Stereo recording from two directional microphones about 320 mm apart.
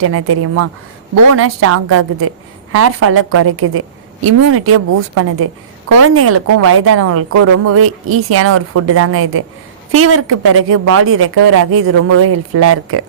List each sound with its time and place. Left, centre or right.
0.0 s a woman's voice: right